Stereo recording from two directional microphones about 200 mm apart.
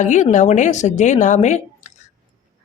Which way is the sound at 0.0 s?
35° left (ahead or behind).